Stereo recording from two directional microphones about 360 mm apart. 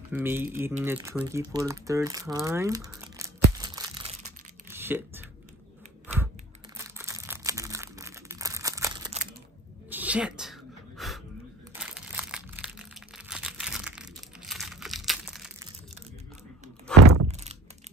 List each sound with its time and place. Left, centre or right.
0.1 s speech: centre
3.5 s crumpling: centre
4.6 s a sound: centre
6.8 s crumpling: centre
9.8 s a sound: centre
11.7 s crumpling: centre
17.0 s thunk: right
17.3 s thunk: centre